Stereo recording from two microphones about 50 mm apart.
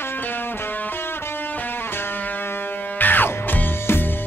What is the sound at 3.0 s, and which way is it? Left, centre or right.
Music, left.